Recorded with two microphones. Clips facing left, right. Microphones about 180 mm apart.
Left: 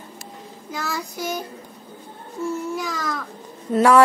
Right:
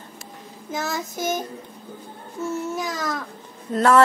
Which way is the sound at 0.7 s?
20° right (ahead or behind).